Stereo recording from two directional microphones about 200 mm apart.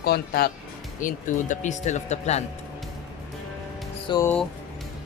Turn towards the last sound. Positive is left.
turn(degrees=20)  # may be behind; listen again after turning